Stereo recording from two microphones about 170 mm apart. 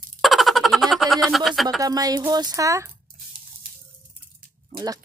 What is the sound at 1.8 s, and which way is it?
A woman's voice, 20° right (ahead or behind).